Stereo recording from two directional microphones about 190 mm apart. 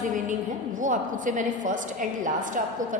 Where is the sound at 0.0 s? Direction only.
45° right (ahead or behind).